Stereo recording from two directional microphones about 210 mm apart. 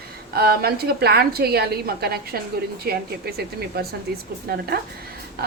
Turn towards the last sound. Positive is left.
turn(degrees=-45)  # may be behind; listen again after turning